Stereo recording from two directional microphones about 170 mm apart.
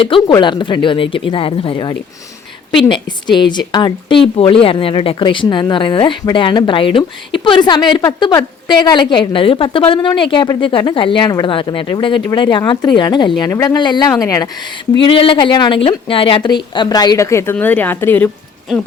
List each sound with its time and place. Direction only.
0.0 s a woman's voice: 30° left (ahead or behind)
14.9 s a woman's voice: 30° left (ahead or behind); by 18.3 s 10° left (ahead or behind)